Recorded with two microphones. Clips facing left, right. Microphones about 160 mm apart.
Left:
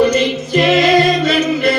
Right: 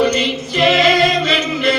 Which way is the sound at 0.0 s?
45° left (ahead or behind).